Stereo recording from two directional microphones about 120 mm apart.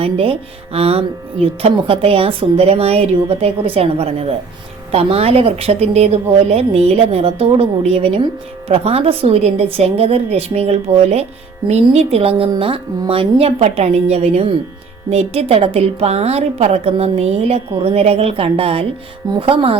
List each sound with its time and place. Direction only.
0.0 s a woman's voice: 50° right (ahead or behind)